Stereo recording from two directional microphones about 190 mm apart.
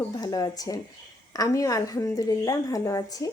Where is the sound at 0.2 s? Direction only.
20° left (ahead or behind).